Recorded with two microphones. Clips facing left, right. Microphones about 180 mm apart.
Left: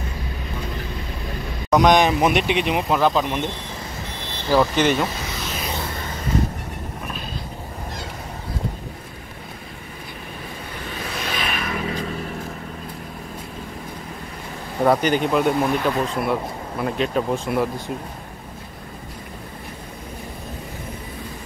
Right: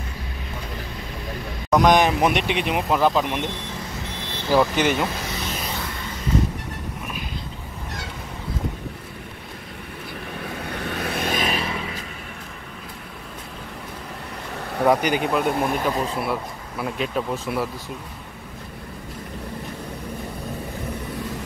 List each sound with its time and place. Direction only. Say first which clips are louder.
1.7 s speech: left 1 dB; 5° right (ahead or behind)
4.5 s speech: left 1 dB; 10° right (ahead or behind)
10.9 s vehicle: right 4 dB; 60° right (ahead or behind)
11.4 s vehicle: right 2 dB; 30° right (ahead or behind)
14.9 s speech: left 1 dB; 10° right (ahead or behind)